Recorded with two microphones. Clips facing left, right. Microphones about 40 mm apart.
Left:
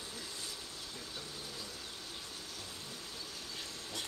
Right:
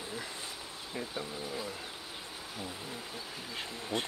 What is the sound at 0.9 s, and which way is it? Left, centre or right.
Speech, right.